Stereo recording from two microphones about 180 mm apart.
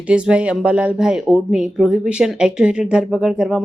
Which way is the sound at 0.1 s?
5° right (ahead or behind).